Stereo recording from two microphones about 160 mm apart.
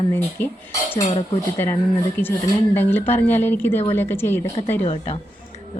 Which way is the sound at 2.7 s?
10° left (ahead or behind).